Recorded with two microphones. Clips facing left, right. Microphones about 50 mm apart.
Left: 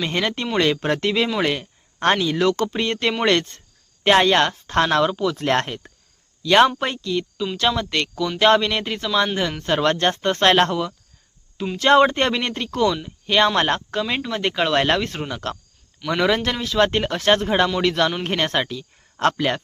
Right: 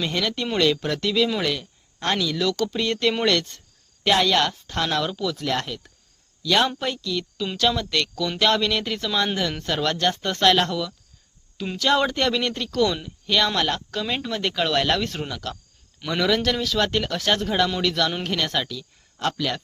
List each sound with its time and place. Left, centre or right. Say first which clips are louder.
0.1 s speech: left 2 dB; left
1.4 s a sound: left 4 dB; left
2.1 s speech: left 4 dB; left
5.0 s speech: left 5 dB; left
5.4 s speech: left 5 dB; left; by 9.7 s centre
9.7 s speech: left 5 dB; left
13.6 s speech: left 4 dB; left
14.0 s speech: left 3 dB; centre
14.3 s speech: left 3 dB; left
15.4 s speech: left 4 dB; left
16.0 s speech: left 2 dB; left
19.1 s speech: left 6 dB; left